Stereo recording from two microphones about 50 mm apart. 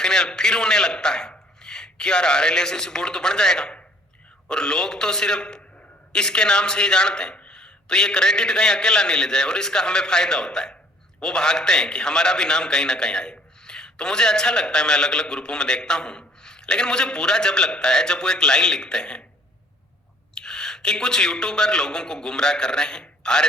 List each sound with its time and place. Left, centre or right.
0.0 s a man's voice: centre
20.3 s a man's voice: centre